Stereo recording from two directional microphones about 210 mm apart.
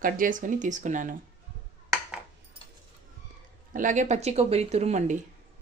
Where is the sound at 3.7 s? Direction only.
35° right (ahead or behind).